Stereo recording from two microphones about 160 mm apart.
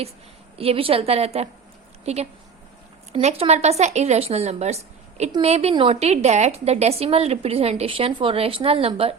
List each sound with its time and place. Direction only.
0.5 s a woman's voice: 35° right (ahead or behind)